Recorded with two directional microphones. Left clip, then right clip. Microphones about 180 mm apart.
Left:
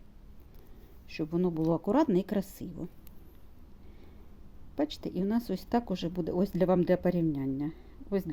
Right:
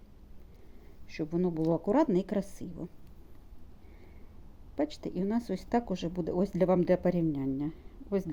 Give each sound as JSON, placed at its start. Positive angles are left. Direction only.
{"t": 1.0, "sound": "a woman's voice", "side_deg": 35}
{"t": 4.7, "sound": "speech", "side_deg": 30}